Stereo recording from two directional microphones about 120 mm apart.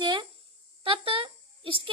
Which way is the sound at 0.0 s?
40° right (ahead or behind).